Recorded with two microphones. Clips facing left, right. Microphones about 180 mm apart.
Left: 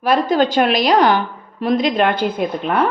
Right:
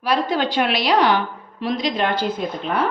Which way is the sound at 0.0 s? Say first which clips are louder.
Left 5 dB; 45° left (ahead or behind).